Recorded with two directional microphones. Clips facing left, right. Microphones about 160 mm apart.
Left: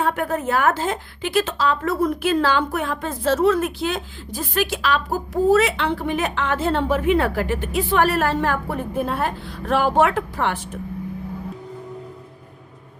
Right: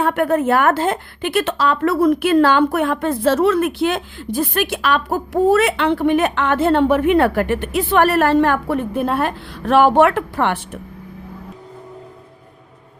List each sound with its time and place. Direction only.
0.0 s a woman's voice: 65° right (ahead or behind)